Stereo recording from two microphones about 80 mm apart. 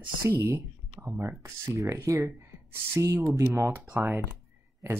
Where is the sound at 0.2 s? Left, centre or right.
Right.